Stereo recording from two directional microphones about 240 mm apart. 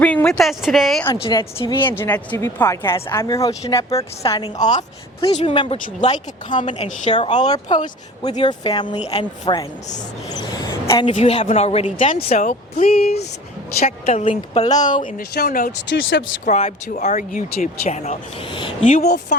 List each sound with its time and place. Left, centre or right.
0.0 s speech: centre
1.1 s speech: centre
1.8 s speech: centre
14.8 s speech: left
16.5 s speech: left
19.0 s speech: left